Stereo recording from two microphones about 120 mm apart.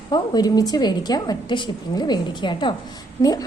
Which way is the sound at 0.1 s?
35° left (ahead or behind).